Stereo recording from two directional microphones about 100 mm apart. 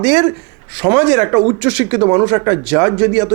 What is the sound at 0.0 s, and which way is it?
Speech, 10° right (ahead or behind).